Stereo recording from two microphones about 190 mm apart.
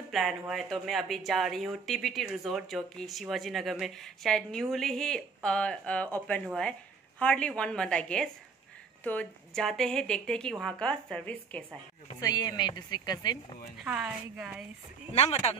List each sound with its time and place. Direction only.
0.1 s speech: centre (ahead or behind)
12.2 s speech: 20° left (ahead or behind)
13.8 s speech: 5° right (ahead or behind)
15.1 s speech: 35° left (ahead or behind)